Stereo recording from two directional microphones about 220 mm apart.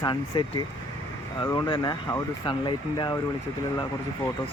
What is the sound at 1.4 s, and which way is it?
Speech, 20° left (ahead or behind).